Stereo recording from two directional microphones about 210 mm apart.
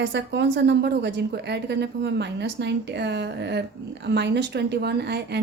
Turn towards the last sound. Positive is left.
turn(degrees=-50)  # may be behind; listen again after turning